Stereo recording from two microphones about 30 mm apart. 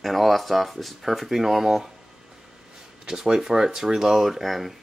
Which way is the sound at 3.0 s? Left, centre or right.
Centre.